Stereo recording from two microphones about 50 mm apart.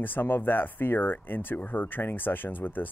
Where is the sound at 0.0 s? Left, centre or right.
Left.